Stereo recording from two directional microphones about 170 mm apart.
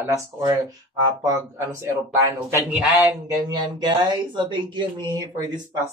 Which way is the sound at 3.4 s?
25° right (ahead or behind).